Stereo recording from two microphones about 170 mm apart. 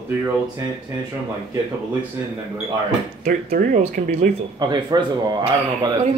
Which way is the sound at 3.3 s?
55° right (ahead or behind).